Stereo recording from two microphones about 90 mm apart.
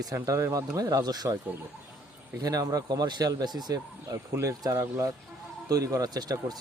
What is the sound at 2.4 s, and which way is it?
Speech, 40° right (ahead or behind).